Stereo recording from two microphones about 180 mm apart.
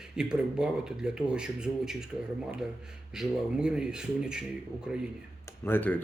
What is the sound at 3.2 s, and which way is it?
Speech, 5° right (ahead or behind).